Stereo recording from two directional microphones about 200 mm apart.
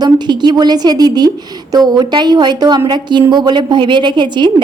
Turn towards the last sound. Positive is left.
turn(degrees=-20)  # may be behind; listen again after turning